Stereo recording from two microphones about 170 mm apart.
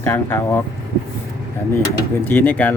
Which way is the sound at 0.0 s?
10° left (ahead or behind).